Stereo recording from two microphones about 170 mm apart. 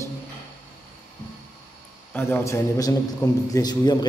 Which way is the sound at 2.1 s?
15° left (ahead or behind).